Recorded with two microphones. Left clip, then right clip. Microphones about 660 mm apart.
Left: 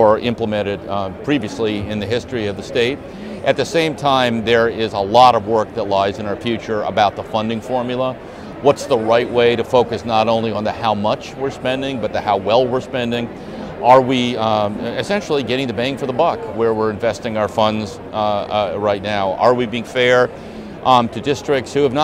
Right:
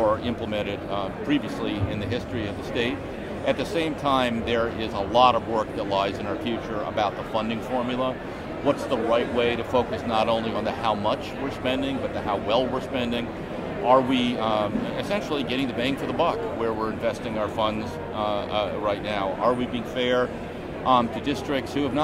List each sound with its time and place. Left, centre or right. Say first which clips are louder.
0.0 s a man's voice: left 10 dB; left